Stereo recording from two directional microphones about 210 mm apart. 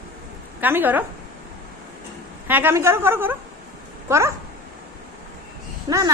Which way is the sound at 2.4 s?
10° right (ahead or behind).